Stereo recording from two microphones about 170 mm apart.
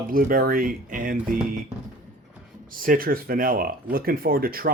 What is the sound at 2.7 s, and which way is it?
Speech, 55° right (ahead or behind).